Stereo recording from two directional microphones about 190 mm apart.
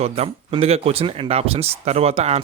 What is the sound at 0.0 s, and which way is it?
Speech, 30° right (ahead or behind).